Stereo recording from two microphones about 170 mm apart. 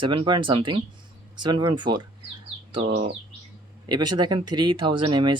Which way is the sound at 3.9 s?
25° right (ahead or behind).